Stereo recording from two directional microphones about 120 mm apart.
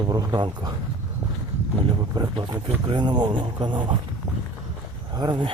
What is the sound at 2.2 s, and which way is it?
Speech, 40° right (ahead or behind).